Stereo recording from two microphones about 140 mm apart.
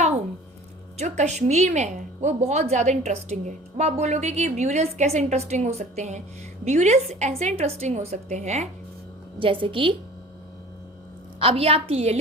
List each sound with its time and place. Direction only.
0.9 s a woman's voice: 55° right (ahead or behind)
9.4 s a woman's voice: 40° right (ahead or behind)
11.3 s a woman's voice: 40° right (ahead or behind)